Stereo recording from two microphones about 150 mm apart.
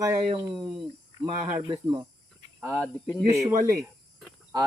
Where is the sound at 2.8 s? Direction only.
20° right (ahead or behind).